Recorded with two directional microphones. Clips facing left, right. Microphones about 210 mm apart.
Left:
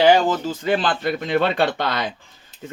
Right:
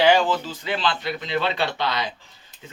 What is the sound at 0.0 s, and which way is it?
Speech, 45° left (ahead or behind).